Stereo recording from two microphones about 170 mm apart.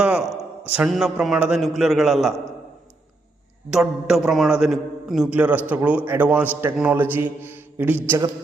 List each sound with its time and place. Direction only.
0.0 s a sound: 5° right (ahead or behind)
0.8 s a man's voice: centre (ahead or behind)
3.7 s a man's voice: 5° right (ahead or behind)